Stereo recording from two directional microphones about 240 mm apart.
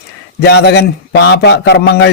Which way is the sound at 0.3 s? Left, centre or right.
Left.